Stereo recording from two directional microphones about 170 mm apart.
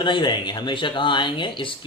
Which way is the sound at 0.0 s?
30° left (ahead or behind).